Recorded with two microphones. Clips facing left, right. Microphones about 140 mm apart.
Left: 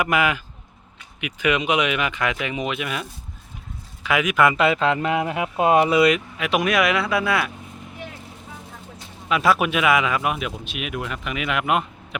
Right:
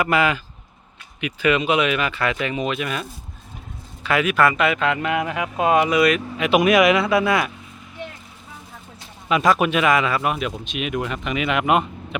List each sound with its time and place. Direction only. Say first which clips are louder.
0.0 s speech: right 2 dB; 10° left (ahead or behind)
6.3 s speech: right 5 dB; centre (ahead or behind)
9.3 s speech: right 2 dB; 5° left (ahead or behind)